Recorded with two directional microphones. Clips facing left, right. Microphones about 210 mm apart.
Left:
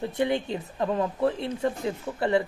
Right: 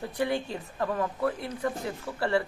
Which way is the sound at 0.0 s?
20° left (ahead or behind).